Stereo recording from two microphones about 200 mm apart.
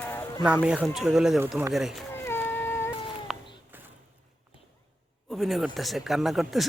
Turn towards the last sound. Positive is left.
turn(degrees=0)  # may be behind; listen again after turning